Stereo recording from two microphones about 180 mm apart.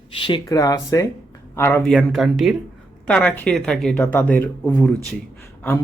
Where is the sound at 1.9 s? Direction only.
Centre (ahead or behind).